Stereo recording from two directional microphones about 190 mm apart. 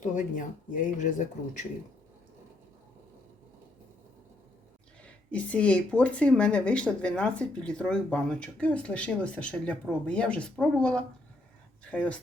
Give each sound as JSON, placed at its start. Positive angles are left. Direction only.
{"t": 0.0, "sound": "speech", "side_deg": 40}
{"t": 5.0, "sound": "speech", "side_deg": 5}